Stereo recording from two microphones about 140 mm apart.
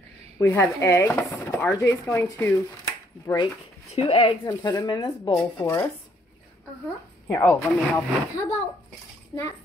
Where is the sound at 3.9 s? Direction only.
45° left (ahead or behind).